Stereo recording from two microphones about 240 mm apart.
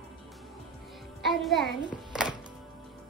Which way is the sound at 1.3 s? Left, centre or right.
Centre.